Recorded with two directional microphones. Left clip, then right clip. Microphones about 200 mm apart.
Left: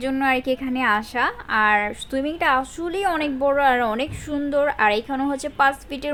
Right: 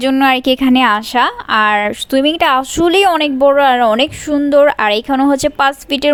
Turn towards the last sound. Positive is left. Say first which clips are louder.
# right 6 dB
turn(degrees=-40)  # may be behind; listen again after turning